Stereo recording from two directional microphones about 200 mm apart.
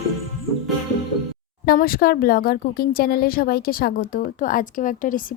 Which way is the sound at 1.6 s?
45° left (ahead or behind).